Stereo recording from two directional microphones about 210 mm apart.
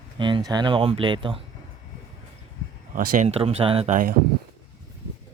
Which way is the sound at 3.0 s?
35° right (ahead or behind).